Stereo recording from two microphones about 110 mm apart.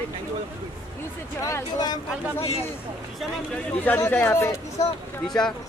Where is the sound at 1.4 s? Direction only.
35° left (ahead or behind).